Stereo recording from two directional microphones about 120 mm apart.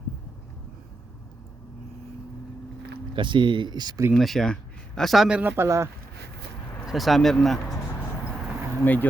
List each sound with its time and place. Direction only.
3.2 s speech: 40° right (ahead or behind)
4.1 s speech: centre (ahead or behind)
5.4 s speech: 15° right (ahead or behind)
6.8 s speech: centre (ahead or behind)
8.8 s speech: 15° left (ahead or behind)